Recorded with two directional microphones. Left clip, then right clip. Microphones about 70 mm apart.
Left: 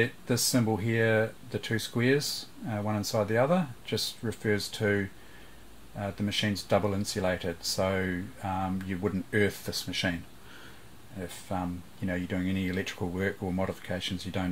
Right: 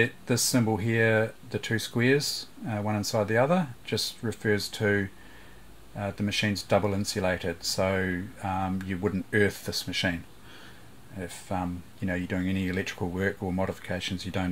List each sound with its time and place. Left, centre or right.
0.0 s speech: right
11.1 s speech: right